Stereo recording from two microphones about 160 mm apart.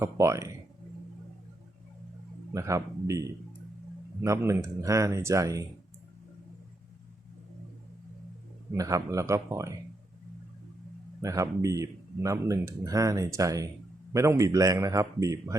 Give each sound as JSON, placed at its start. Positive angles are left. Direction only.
{"t": 0.0, "sound": "speech", "side_deg": -20}
{"t": 2.5, "sound": "speech", "side_deg": -20}
{"t": 8.7, "sound": "speech", "side_deg": -20}
{"t": 11.2, "sound": "speech", "side_deg": -20}